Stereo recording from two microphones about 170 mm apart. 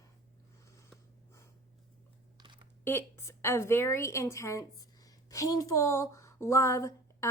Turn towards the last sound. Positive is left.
turn(degrees=15)  # may be behind; listen again after turning